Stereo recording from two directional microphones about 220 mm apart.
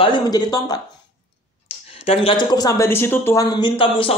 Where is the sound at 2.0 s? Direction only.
20° left (ahead or behind).